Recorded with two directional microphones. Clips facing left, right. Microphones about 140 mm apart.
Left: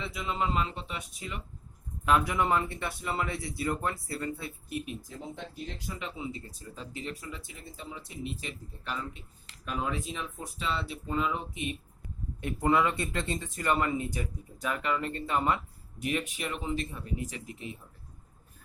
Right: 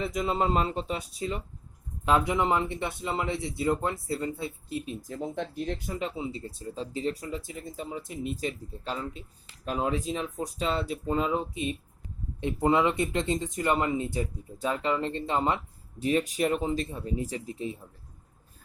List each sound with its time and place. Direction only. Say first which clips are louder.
0.0 s speech: right 5 dB; 40° right (ahead or behind); by 4.9 s 25° right (ahead or behind)
5.0 s speech: right 8 dB; 55° right (ahead or behind)
6.1 s speech: right 4 dB; 30° right (ahead or behind)
12.4 s speech: right 2 dB; 20° right (ahead or behind)